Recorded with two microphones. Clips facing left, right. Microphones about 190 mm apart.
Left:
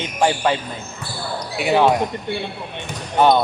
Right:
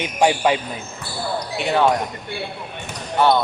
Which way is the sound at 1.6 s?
5° left (ahead or behind).